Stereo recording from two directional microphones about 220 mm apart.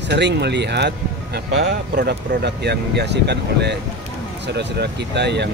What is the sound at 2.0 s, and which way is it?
Speech, 50° right (ahead or behind).